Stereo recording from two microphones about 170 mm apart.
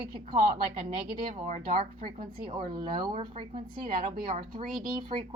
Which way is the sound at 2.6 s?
25° right (ahead or behind).